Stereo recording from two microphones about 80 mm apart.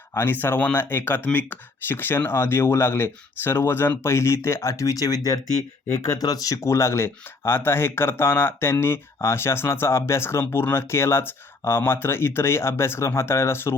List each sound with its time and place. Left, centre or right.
0.1 s speech: left